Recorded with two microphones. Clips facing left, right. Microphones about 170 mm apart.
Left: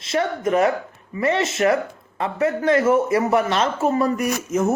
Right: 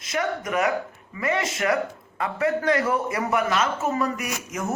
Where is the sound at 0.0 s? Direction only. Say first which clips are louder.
Left 5 dB; 30° left (ahead or behind).